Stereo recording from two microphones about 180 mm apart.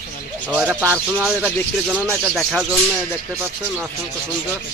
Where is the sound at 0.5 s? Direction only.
10° right (ahead or behind).